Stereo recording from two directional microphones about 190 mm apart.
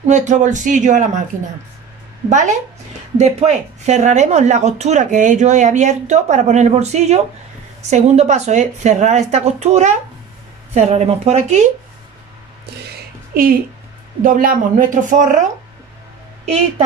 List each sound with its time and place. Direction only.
0.0 s a woman's voice: 40° right (ahead or behind)
2.2 s a woman's voice: 40° right (ahead or behind)
12.7 s a sound: 55° right (ahead or behind)
14.2 s a woman's voice: 45° right (ahead or behind)
16.4 s a woman's voice: 30° right (ahead or behind)